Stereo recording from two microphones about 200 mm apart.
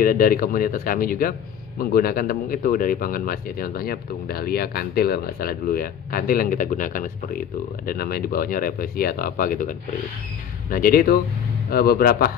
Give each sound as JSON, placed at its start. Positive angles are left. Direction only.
{"t": 0.0, "sound": "speech", "side_deg": 45}